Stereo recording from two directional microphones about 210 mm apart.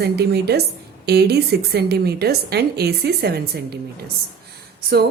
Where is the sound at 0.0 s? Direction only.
50° right (ahead or behind).